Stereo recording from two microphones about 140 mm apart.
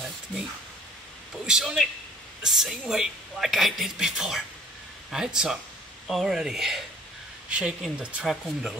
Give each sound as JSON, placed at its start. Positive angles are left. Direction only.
{"t": 1.4, "sound": "a man's voice", "side_deg": -5}